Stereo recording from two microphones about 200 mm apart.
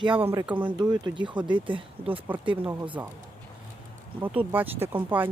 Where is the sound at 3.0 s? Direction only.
10° right (ahead or behind).